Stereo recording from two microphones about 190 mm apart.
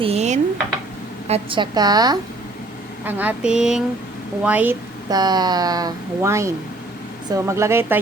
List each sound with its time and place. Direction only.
0.0 s dishes: 35° right (ahead or behind)
1.3 s speech: 25° right (ahead or behind)
3.0 s speech: 10° right (ahead or behind)
5.0 s speech: 20° right (ahead or behind)